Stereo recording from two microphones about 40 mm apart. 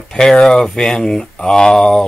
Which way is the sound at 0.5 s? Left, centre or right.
Centre.